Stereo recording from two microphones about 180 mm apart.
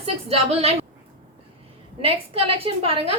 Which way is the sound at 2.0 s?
30° right (ahead or behind).